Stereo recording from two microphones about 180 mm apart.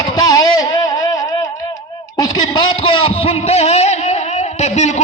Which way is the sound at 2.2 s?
25° left (ahead or behind).